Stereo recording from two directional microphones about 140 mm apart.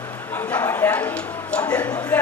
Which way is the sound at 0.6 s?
15° left (ahead or behind).